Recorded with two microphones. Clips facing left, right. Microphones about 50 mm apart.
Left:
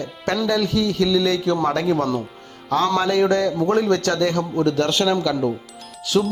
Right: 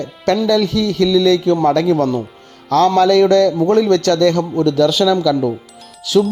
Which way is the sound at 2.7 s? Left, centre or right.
Right.